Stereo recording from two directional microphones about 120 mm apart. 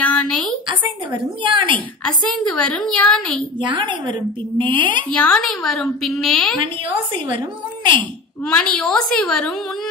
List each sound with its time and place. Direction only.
0.0 s a sound: 10° left (ahead or behind)
0.7 s a woman's voice: 45° right (ahead or behind)
2.0 s a woman's voice: 10° left (ahead or behind)
3.5 s a woman's voice: 40° right (ahead or behind)
5.1 s a woman's voice: 5° left (ahead or behind)
6.6 s a woman's voice: 45° right (ahead or behind)
8.5 s a woman's voice: 10° left (ahead or behind)